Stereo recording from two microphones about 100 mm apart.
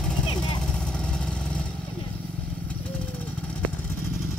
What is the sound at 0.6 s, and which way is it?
Vehicle, 10° left (ahead or behind).